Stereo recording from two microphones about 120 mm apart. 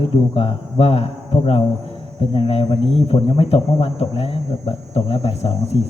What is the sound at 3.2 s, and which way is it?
Speech, 50° left (ahead or behind).